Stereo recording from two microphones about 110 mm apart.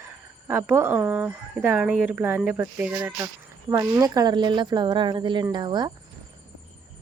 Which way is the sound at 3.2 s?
30° right (ahead or behind).